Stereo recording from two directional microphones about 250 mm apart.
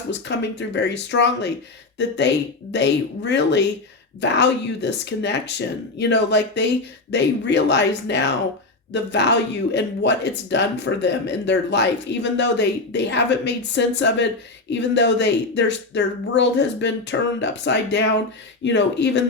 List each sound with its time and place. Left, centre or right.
0.1 s speech: left